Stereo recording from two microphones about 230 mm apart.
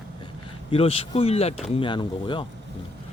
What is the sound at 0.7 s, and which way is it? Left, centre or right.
Speech, left.